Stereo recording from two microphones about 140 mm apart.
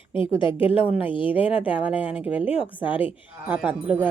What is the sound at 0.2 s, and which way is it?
Speech, 35° left (ahead or behind).